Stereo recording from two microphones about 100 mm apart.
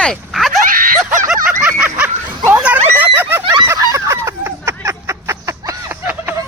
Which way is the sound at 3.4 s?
50° right (ahead or behind).